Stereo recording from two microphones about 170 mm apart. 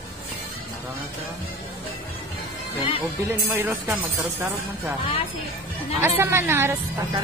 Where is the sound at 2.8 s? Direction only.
30° left (ahead or behind).